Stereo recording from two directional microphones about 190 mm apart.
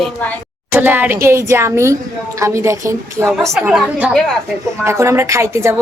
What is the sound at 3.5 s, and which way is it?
Speech, centre (ahead or behind).